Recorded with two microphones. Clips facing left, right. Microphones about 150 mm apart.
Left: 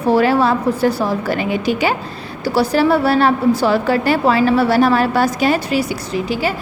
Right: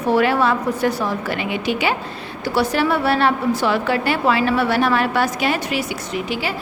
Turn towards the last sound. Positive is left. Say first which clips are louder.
# left 5 dB
turn(degrees=40)  # may be behind; listen again after turning